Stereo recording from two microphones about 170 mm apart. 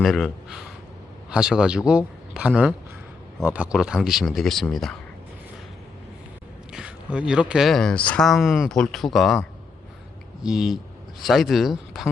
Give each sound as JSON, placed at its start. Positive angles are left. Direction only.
{"t": 0.0, "sound": "speech", "side_deg": 0}
{"t": 6.7, "sound": "speech", "side_deg": -5}
{"t": 10.4, "sound": "speech", "side_deg": 0}